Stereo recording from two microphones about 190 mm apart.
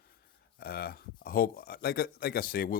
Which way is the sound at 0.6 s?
55° left (ahead or behind).